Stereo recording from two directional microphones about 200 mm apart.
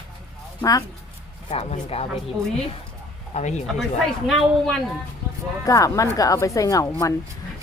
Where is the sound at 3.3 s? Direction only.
35° left (ahead or behind).